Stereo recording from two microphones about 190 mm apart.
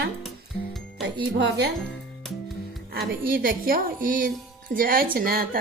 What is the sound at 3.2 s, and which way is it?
A woman's voice, 50° right (ahead or behind).